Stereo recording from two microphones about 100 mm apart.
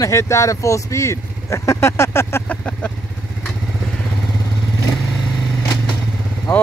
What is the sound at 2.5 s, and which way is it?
Vehicle, 15° left (ahead or behind).